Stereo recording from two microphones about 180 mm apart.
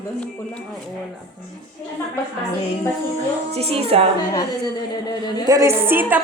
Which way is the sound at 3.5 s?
35° right (ahead or behind).